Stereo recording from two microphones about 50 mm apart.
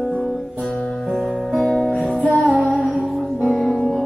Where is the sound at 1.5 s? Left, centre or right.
Centre.